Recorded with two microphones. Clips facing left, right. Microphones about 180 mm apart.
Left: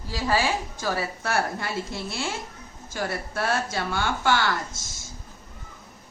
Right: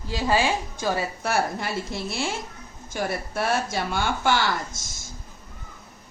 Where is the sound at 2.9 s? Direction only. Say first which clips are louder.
Right 2 dB; 15° right (ahead or behind).